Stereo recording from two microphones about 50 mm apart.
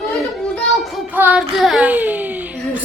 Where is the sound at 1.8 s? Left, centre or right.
Right.